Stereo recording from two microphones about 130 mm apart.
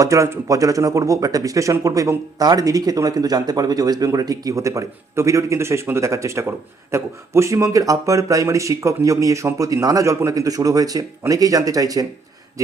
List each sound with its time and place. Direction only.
0.0 s speech: 25° right (ahead or behind)